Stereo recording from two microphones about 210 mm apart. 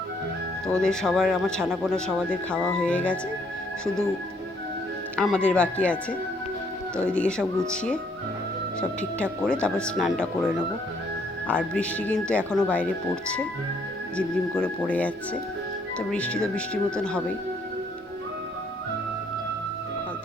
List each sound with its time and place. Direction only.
0.8 s speech: centre (ahead or behind)
1.9 s speech: 5° left (ahead or behind)
5.1 s speech: 5° left (ahead or behind)
9.2 s speech: centre (ahead or behind)
14.2 s speech: 5° left (ahead or behind)